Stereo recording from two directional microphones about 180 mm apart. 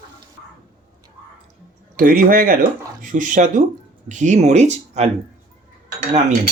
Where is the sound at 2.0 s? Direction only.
50° right (ahead or behind).